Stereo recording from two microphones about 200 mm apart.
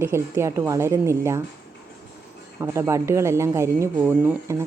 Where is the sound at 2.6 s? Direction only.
15° right (ahead or behind).